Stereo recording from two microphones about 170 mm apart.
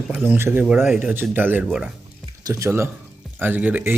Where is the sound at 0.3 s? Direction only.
15° right (ahead or behind).